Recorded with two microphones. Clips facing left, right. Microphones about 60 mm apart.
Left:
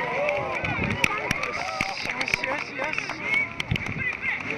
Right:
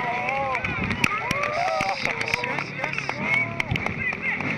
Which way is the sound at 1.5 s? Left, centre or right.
Right.